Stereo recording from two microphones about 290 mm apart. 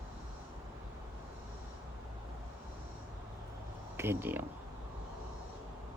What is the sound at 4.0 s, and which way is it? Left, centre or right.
Speech, centre.